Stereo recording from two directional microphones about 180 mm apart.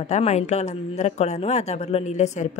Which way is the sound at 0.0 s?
40° left (ahead or behind).